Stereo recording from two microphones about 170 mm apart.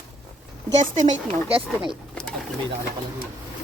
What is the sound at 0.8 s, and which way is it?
Speech, 45° right (ahead or behind).